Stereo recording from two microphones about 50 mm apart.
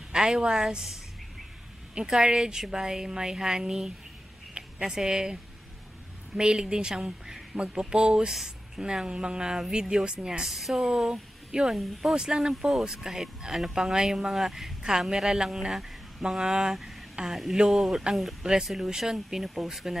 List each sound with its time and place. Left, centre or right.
0.1 s speech: centre
2.0 s speech: centre